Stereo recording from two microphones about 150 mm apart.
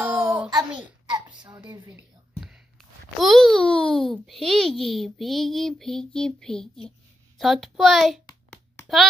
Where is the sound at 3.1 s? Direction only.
Centre (ahead or behind).